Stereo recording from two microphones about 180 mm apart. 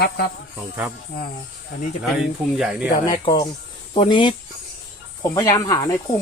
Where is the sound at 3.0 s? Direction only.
30° left (ahead or behind).